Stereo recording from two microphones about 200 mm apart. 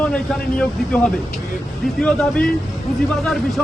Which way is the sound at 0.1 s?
5° left (ahead or behind).